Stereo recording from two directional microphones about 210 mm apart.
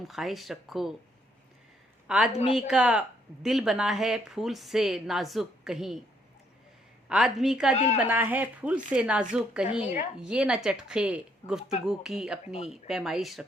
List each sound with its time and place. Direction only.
0.0 s a woman's voice: centre (ahead or behind)
2.0 s a woman's voice: 5° right (ahead or behind)
2.3 s speech: 30° left (ahead or behind)
2.6 s a woman's voice: 5° right (ahead or behind)
7.1 s a woman's voice: centre (ahead or behind)